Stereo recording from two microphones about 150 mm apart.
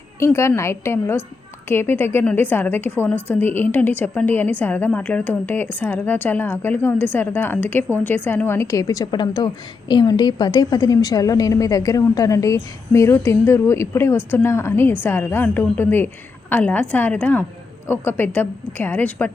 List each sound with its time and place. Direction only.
0.3 s a woman's voice: 20° left (ahead or behind)